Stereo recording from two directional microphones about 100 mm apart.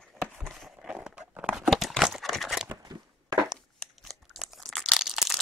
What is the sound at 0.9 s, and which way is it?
Crumpling, 10° right (ahead or behind).